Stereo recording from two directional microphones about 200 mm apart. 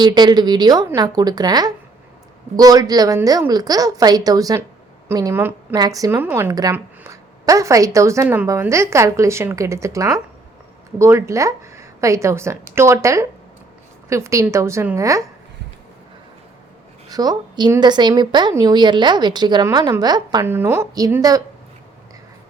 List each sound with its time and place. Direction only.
0.0 s a woman's voice: 20° right (ahead or behind)
17.1 s speech: 20° right (ahead or behind)